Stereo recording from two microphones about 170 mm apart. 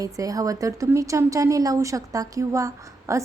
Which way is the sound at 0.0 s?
20° right (ahead or behind).